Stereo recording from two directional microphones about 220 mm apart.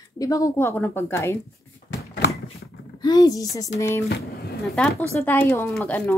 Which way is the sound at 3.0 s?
20° left (ahead or behind).